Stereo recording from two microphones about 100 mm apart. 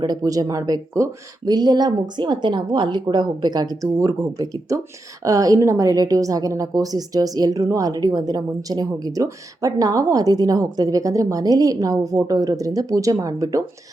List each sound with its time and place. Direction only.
0.0 s a woman's voice: 40° right (ahead or behind)
1.5 s a woman's voice: 45° right (ahead or behind)